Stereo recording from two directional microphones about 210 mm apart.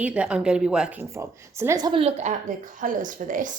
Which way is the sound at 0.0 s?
5° right (ahead or behind).